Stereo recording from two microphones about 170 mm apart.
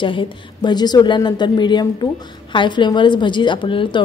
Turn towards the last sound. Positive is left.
turn(degrees=30)  # may be behind; listen again after turning